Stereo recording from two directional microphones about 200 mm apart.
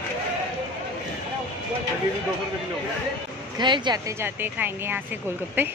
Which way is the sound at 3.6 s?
20° right (ahead or behind).